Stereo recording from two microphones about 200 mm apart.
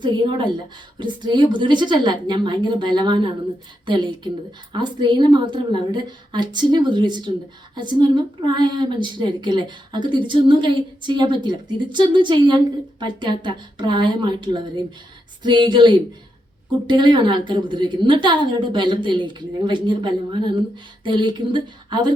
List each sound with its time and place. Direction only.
0.0 s speech: 20° right (ahead or behind)